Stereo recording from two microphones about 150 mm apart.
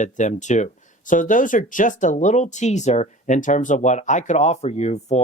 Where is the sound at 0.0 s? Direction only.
55° left (ahead or behind).